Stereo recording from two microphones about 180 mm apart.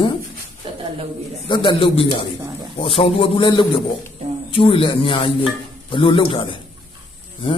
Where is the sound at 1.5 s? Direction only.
25° left (ahead or behind).